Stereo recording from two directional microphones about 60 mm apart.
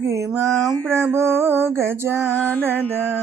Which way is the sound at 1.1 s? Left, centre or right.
Right.